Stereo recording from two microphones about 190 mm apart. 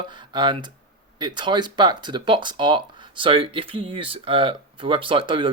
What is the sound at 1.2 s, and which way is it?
Speech, 25° right (ahead or behind).